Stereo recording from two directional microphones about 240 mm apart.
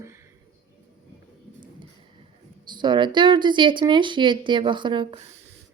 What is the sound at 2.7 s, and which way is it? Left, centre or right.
Speech, centre.